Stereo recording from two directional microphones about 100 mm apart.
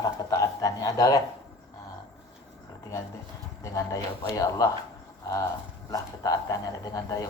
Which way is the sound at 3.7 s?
35° left (ahead or behind).